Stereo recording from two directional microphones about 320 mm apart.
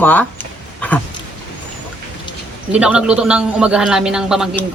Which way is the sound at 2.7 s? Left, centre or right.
Centre.